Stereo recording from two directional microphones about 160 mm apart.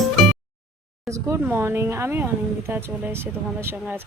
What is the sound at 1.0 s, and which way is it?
Speech, 20° right (ahead or behind).